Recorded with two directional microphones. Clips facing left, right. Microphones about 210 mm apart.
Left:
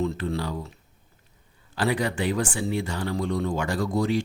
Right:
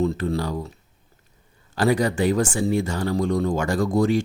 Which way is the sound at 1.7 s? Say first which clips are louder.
Right 5 dB; 45° right (ahead or behind).